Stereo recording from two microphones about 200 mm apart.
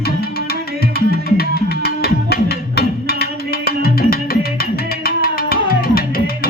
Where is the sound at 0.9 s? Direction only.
50° left (ahead or behind).